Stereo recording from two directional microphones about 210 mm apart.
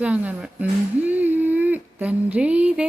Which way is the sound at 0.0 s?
5° right (ahead or behind).